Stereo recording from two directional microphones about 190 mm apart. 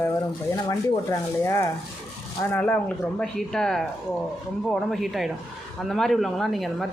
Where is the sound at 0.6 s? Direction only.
15° left (ahead or behind).